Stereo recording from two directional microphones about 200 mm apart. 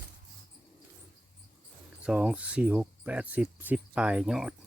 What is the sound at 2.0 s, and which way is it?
Speech, 5° right (ahead or behind).